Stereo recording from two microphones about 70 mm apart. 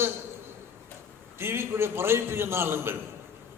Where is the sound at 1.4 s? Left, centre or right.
Right.